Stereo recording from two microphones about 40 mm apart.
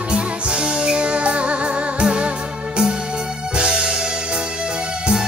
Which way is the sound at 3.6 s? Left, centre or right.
Right.